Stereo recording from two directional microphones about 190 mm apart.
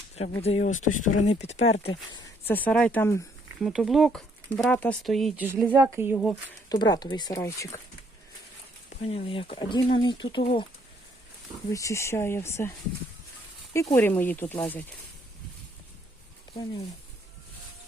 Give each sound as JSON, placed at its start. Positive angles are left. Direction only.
{"t": 0.4, "sound": "speech", "side_deg": 35}
{"t": 2.5, "sound": "speech", "side_deg": 10}
{"t": 3.6, "sound": "speech", "side_deg": 0}
{"t": 6.7, "sound": "speech", "side_deg": 20}
{"t": 9.0, "sound": "speech", "side_deg": 35}
{"t": 11.7, "sound": "speech", "side_deg": 15}
{"t": 13.7, "sound": "speech", "side_deg": 15}